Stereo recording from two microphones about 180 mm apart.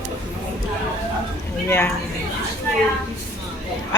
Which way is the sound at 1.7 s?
15° left (ahead or behind).